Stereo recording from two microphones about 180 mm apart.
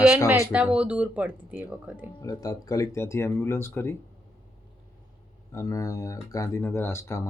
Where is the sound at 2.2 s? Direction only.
20° left (ahead or behind).